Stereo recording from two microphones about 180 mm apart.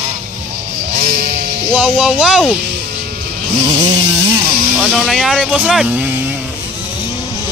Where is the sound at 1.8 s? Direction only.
5° right (ahead or behind).